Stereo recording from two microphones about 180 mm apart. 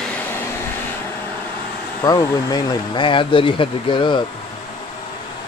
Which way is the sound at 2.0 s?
20° left (ahead or behind).